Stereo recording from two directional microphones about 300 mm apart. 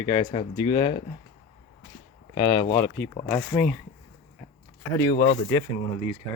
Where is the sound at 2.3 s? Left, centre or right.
Centre.